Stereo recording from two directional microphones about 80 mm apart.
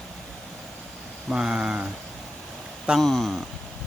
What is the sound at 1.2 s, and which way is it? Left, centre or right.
Speech, centre.